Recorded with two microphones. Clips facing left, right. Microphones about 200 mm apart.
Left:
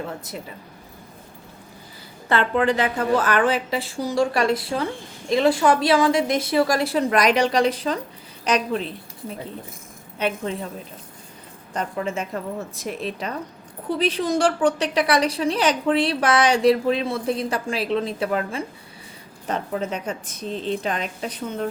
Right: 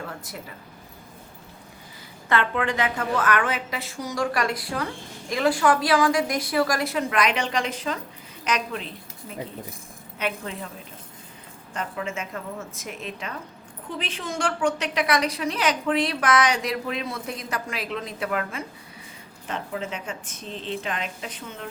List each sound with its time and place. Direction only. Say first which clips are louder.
0.0 s a woman's voice: left 5 dB; 20° left (ahead or behind)
2.3 s a woman's voice: left 4 dB; 35° left (ahead or behind)
10.2 s a woman's voice: left 5 dB; 30° left (ahead or behind)
11.7 s a woman's voice: left 5 dB; 40° left (ahead or behind)